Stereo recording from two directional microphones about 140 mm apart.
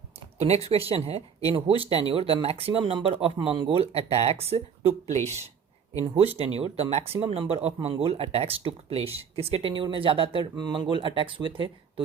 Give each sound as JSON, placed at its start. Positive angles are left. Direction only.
{"t": 0.3, "sound": "speech", "side_deg": -50}